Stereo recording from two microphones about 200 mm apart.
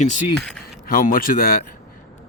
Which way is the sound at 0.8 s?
45° left (ahead or behind).